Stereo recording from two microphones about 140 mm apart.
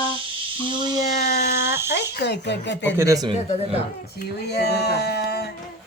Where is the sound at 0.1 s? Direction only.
40° right (ahead or behind).